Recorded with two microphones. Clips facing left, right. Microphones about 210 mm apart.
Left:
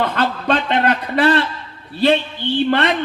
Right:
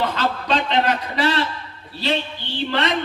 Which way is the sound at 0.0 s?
55° left (ahead or behind).